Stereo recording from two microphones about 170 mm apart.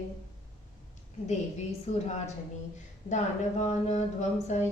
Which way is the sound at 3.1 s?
40° left (ahead or behind).